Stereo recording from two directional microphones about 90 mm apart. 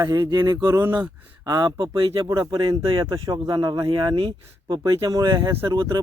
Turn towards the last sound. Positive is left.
turn(degrees=-55)  # may be behind; listen again after turning